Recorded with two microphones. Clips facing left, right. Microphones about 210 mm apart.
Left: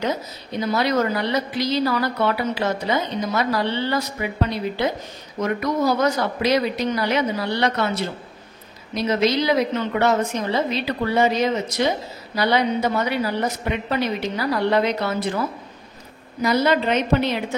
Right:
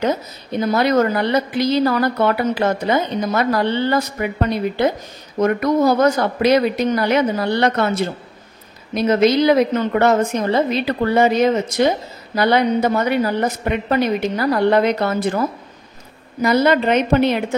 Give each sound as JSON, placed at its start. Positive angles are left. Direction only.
{"t": 0.0, "sound": "a woman's voice", "side_deg": -50}